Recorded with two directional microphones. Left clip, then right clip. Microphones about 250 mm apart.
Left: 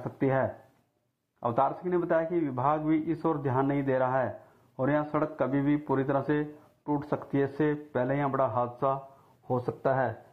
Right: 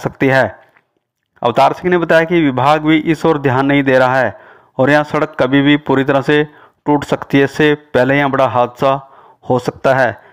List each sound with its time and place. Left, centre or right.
0.0 s a man's voice: right